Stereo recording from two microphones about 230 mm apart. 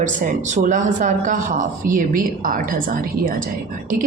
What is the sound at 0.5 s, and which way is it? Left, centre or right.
A woman's voice, right.